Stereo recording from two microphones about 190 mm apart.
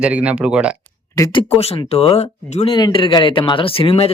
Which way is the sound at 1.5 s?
30° left (ahead or behind).